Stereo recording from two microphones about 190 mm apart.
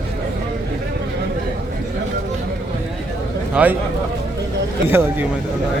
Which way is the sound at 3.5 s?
10° right (ahead or behind).